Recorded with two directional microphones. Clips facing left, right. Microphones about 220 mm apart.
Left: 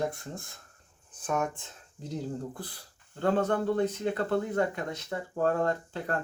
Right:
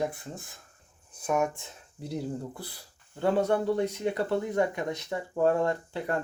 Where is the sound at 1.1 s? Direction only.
10° right (ahead or behind).